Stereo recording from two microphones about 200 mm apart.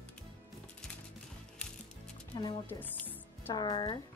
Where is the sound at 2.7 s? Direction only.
10° left (ahead or behind).